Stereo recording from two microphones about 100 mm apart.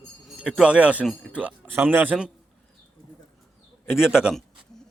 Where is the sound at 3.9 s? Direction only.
5° right (ahead or behind).